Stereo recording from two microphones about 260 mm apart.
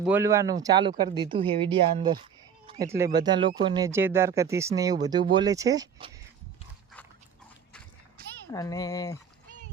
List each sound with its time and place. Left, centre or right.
0.0 s speech: centre
8.5 s speech: centre